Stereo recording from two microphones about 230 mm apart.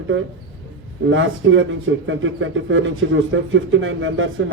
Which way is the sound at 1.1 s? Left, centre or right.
Right.